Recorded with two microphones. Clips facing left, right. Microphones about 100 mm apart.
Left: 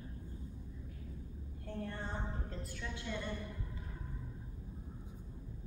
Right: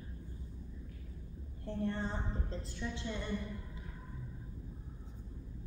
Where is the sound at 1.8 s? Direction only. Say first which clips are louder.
Right 5 dB; 20° right (ahead or behind).